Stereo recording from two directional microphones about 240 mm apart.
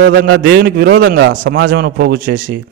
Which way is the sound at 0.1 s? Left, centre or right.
Right.